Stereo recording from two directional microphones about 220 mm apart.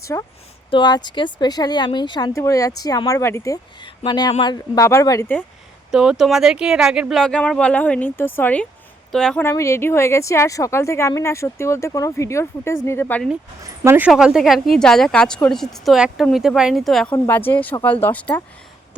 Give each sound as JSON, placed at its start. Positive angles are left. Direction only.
{"t": 0.0, "sound": "speech", "side_deg": 15}
{"t": 5.9, "sound": "speech", "side_deg": 0}
{"t": 13.8, "sound": "speech", "side_deg": -10}